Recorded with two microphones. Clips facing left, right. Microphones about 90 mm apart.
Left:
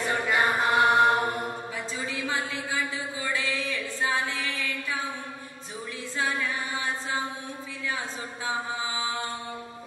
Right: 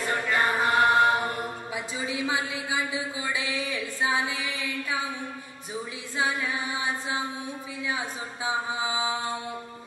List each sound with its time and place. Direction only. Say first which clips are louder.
0.3 s chant: even; centre (ahead or behind)
2.0 s a sound: right 2 dB; 15° right (ahead or behind)
6.1 s a capella: right 1 dB; 15° right (ahead or behind)
8.5 s mantra: right 2 dB; 15° right (ahead or behind)